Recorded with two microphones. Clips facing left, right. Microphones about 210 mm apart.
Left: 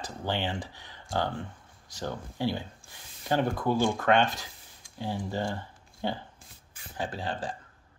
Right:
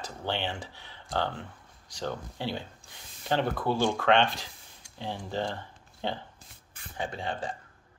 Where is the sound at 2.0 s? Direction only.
10° left (ahead or behind).